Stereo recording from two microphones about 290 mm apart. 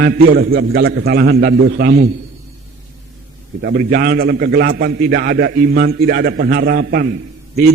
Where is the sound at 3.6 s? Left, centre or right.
Right.